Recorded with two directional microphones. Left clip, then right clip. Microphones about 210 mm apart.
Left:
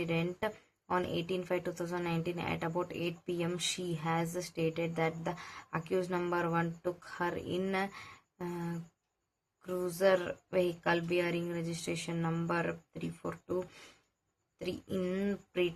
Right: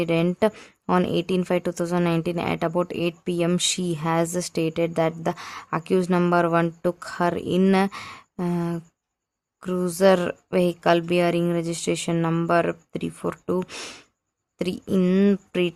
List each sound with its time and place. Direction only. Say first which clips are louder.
0.0 s a woman's voice: right 13 dB; 50° right (ahead or behind)